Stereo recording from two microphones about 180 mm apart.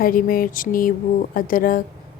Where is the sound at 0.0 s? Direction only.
50° left (ahead or behind).